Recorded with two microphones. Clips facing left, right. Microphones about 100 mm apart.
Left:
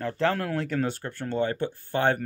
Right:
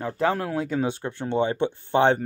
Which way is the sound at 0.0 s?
10° right (ahead or behind).